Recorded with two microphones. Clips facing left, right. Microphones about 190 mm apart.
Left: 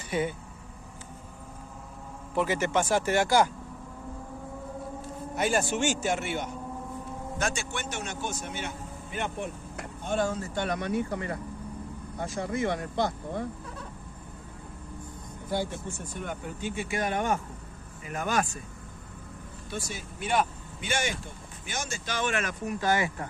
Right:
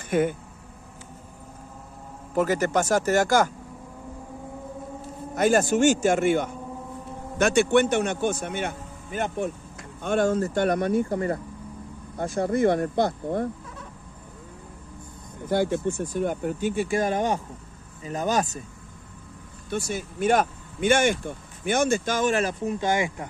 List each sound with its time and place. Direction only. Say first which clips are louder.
0.1 s speech: right 6 dB; 50° right (ahead or behind)
2.3 s speech: right 4 dB; 40° right (ahead or behind)
5.3 s speech: right 7 dB; 45° right (ahead or behind)
7.3 s a man's voice: right 14 dB; 65° right (ahead or behind)
15.5 s speech: right 8 dB; 70° right (ahead or behind)
16.7 s speech: right 3 dB; 35° right (ahead or behind)
19.7 s speech: right 8 dB; 50° right (ahead or behind); by 22.8 s 30° right (ahead or behind)
22.8 s speech: even; 15° right (ahead or behind)